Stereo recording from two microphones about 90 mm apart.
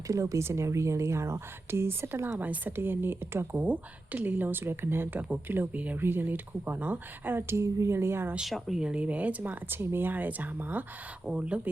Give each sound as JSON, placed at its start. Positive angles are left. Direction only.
{"t": 0.1, "sound": "a woman's voice", "side_deg": -35}
{"t": 8.4, "sound": "speech", "side_deg": 0}